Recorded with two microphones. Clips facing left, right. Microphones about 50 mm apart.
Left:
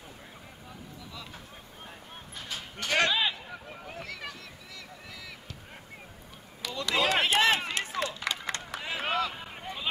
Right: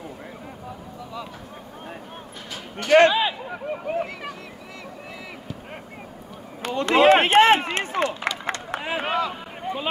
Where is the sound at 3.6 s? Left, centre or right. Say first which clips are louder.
Right 15 dB; right.